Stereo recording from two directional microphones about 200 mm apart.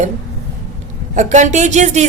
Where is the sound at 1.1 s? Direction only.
35° right (ahead or behind).